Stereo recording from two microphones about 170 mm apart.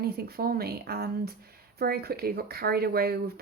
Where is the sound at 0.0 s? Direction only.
65° right (ahead or behind).